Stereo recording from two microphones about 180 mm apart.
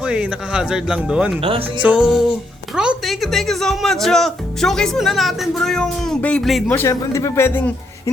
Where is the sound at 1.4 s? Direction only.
30° right (ahead or behind).